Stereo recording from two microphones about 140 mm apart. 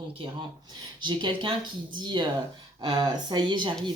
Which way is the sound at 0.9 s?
35° right (ahead or behind).